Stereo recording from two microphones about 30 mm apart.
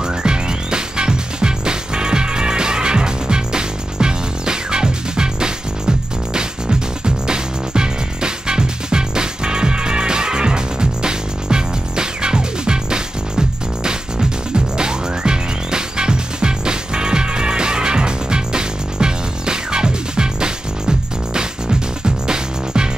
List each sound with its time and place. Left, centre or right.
0.0 s music: right